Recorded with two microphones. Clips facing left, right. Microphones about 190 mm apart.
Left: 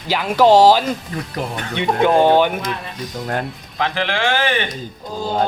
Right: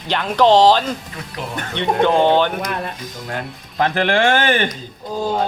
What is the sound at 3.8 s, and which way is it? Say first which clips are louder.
Speech: right 4 dB; 50° right (ahead or behind).